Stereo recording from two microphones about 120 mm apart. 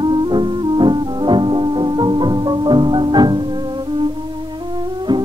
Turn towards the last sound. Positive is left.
turn(degrees=-40)  # may be behind; listen again after turning